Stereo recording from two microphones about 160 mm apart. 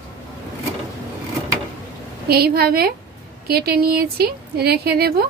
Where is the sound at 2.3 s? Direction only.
75° right (ahead or behind).